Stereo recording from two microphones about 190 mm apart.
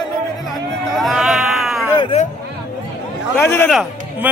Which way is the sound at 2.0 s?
30° left (ahead or behind).